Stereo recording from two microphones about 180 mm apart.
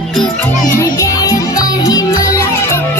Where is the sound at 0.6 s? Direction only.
20° left (ahead or behind).